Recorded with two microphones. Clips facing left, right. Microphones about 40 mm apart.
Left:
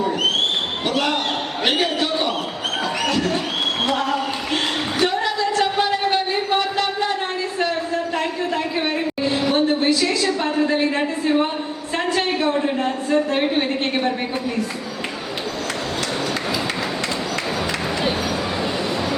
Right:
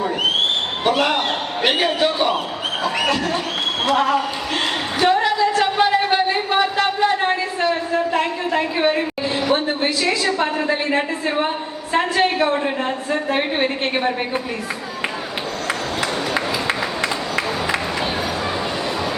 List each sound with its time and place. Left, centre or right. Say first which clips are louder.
0.9 s a woman's voice: right 4 dB; centre
3.9 s a sound: right 4 dB; centre
9.6 s a woman's voice: left 1 dB; centre